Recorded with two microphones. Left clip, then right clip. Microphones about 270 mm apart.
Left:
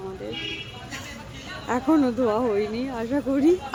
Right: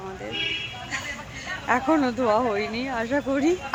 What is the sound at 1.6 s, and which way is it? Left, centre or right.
Speech, centre.